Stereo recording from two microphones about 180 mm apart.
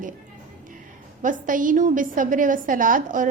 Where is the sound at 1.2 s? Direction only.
45° right (ahead or behind).